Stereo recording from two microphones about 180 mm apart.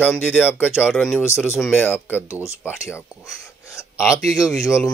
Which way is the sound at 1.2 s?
15° left (ahead or behind).